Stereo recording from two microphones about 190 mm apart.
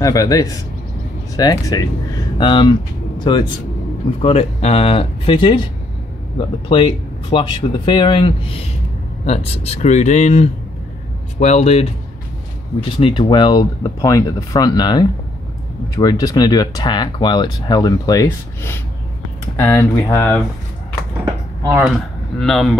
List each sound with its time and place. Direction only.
0.0 s speech: 20° left (ahead or behind); by 11.9 s 35° left (ahead or behind)
12.9 s speech: 25° left (ahead or behind)
22.4 s speech: centre (ahead or behind)